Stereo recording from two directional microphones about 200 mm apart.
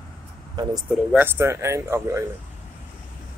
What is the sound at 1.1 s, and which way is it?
Speech, 10° right (ahead or behind).